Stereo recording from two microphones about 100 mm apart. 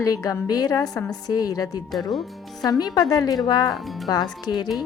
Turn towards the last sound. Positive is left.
turn(degrees=45)  # may be behind; listen again after turning